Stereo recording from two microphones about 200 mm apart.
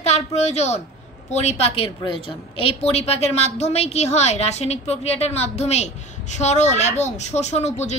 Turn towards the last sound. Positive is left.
turn(degrees=35)  # may be behind; listen again after turning